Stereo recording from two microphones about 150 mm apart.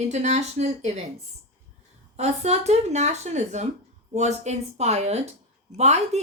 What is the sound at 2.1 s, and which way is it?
A woman's voice, 45° right (ahead or behind).